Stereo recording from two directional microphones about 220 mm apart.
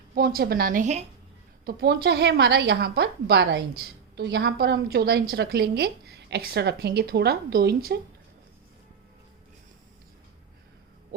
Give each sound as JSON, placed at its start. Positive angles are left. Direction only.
{"t": 0.1, "sound": "a woman's voice", "side_deg": -40}
{"t": 1.6, "sound": "a woman's voice", "side_deg": -45}